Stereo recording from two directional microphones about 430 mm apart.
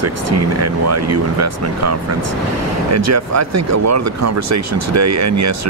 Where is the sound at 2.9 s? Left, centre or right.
Right.